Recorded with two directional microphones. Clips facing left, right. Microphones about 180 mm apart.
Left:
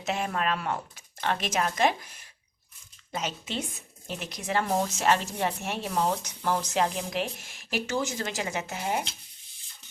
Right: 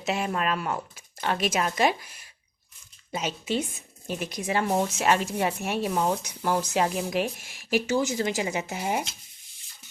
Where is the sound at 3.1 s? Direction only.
10° right (ahead or behind).